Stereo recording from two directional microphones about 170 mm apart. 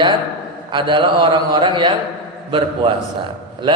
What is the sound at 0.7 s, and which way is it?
A man's voice, 30° right (ahead or behind).